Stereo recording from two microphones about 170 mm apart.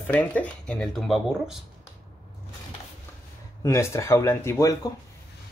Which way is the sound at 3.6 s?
15° left (ahead or behind).